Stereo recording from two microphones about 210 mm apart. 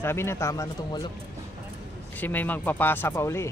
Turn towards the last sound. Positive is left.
turn(degrees=10)  # may be behind; listen again after turning